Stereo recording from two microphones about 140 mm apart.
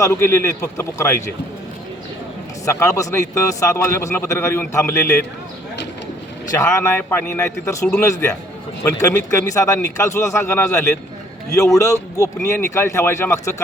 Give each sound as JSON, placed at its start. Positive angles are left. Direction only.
{"t": 0.0, "sound": "a man's voice", "side_deg": 20}
{"t": 2.6, "sound": "a man's voice", "side_deg": 20}
{"t": 6.6, "sound": "a man's voice", "side_deg": 15}